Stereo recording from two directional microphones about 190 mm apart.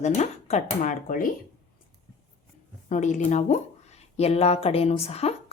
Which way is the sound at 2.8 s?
40° left (ahead or behind).